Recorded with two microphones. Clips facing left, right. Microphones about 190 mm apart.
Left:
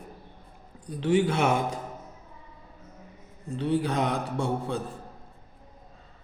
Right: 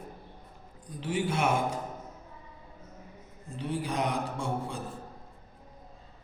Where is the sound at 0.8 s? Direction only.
65° left (ahead or behind).